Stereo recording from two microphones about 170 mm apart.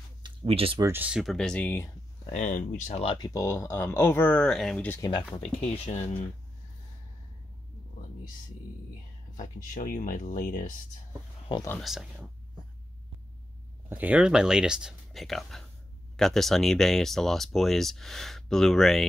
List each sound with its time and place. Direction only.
0.2 s a sound: 30° right (ahead or behind)
0.8 s speech: 10° right (ahead or behind); by 1.9 s 10° left (ahead or behind)
2.2 s speech: 45° left (ahead or behind)
3.2 s speech: 20° left (ahead or behind)
5.3 s speech: 40° left (ahead or behind)
9.4 s speech: 50° left (ahead or behind)
11.8 s speech: centre (ahead or behind)
13.8 s speech: 10° right (ahead or behind)